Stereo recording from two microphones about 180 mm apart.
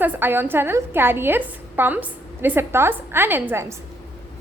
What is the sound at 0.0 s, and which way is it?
A woman's voice, 10° right (ahead or behind).